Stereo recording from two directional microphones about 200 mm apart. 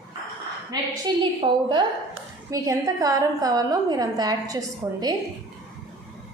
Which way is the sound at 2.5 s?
15° right (ahead or behind).